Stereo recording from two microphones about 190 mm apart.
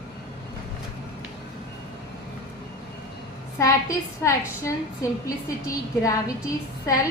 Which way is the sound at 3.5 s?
15° left (ahead or behind).